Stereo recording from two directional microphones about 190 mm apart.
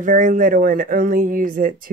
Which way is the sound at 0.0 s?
45° right (ahead or behind).